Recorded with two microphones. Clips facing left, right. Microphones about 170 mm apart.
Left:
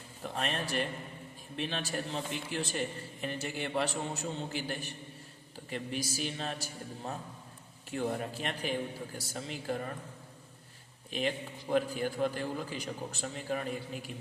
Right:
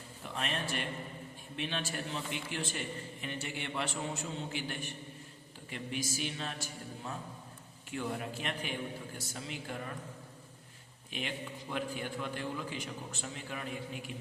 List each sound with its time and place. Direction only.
0.2 s a man's voice: 40° left (ahead or behind)
11.1 s a man's voice: 40° left (ahead or behind)